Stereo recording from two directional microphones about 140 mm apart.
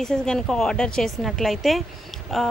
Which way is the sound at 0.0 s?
5° left (ahead or behind).